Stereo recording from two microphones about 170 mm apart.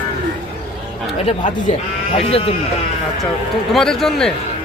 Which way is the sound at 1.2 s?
45° left (ahead or behind).